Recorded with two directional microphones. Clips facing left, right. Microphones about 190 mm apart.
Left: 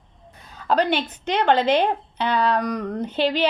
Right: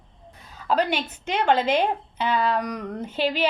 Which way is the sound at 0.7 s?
10° right (ahead or behind).